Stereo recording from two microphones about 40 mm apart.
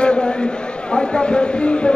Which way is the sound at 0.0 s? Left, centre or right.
Left.